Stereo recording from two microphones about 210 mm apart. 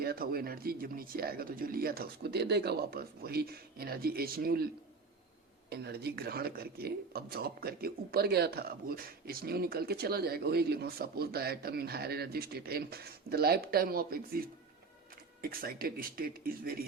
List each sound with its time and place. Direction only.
0.0 s speech: 45° right (ahead or behind)